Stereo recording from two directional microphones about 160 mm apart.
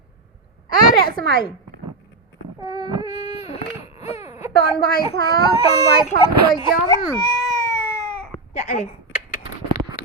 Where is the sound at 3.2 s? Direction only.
40° left (ahead or behind).